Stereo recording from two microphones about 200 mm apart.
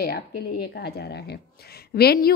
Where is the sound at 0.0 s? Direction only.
50° left (ahead or behind).